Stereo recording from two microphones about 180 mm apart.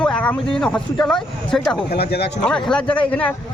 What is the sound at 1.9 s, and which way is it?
Speech, 60° left (ahead or behind).